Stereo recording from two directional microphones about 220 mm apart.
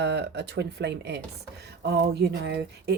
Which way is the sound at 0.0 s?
50° right (ahead or behind).